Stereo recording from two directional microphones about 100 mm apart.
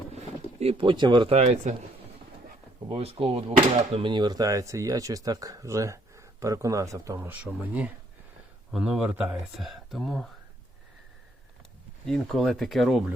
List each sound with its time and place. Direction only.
0.6 s speech: 70° right (ahead or behind); by 1.3 s 50° right (ahead or behind)
1.3 s speech: 90° right
2.9 s speech: 70° right (ahead or behind)
3.9 s speech: 50° right (ahead or behind); by 7.2 s 35° right (ahead or behind)
7.2 s speech: 15° right (ahead or behind)
9.6 s speech: centre (ahead or behind)
12.0 s speech: 5° left (ahead or behind)